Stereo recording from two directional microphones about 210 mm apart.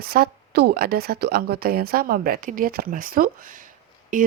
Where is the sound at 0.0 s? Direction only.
45° right (ahead or behind).